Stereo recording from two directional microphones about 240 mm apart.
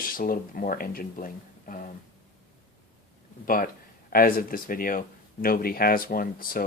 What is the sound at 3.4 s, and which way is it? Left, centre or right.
Speech, left.